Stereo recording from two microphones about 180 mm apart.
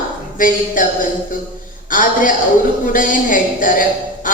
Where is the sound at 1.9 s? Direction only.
50° left (ahead or behind).